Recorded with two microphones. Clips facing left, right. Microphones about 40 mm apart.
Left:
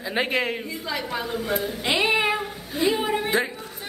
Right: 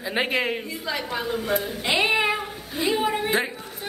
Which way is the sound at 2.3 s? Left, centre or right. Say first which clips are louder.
Left 1 dB; centre.